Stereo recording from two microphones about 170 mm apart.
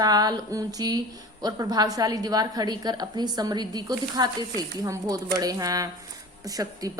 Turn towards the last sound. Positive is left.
turn(degrees=-20)  # may be behind; listen again after turning